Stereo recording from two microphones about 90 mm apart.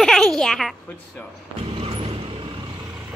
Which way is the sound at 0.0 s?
5° left (ahead or behind).